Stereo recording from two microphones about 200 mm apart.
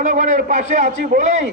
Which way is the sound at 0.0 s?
35° right (ahead or behind).